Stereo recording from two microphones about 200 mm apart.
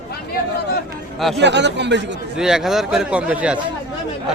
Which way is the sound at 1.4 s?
60° right (ahead or behind).